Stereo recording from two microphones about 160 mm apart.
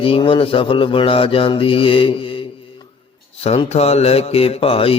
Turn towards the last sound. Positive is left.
turn(degrees=35)  # may be behind; listen again after turning